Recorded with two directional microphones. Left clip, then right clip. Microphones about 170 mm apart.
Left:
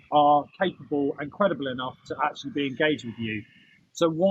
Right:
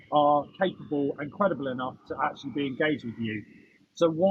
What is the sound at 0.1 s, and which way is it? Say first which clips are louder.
A man's voice: left 3 dB; 25° left (ahead or behind).